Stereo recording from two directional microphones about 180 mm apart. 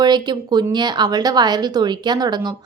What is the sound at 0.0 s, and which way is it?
A woman's voice, 25° right (ahead or behind).